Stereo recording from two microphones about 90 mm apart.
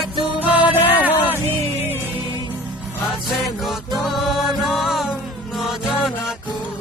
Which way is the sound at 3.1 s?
Centre (ahead or behind).